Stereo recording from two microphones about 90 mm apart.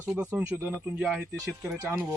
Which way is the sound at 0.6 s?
10° right (ahead or behind).